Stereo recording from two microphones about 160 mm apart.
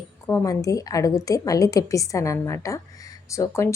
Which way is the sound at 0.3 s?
20° left (ahead or behind).